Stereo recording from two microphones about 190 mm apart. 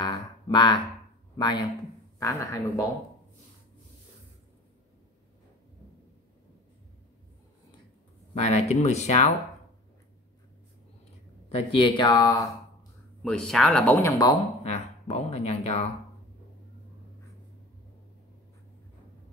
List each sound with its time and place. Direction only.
0.0 s a sound: 25° left (ahead or behind)
1.3 s speech: 20° left (ahead or behind)
8.4 s speech: 35° left (ahead or behind)
11.4 s speech: 30° left (ahead or behind)
13.2 s speech: 5° left (ahead or behind)
14.6 s speech: 35° left (ahead or behind)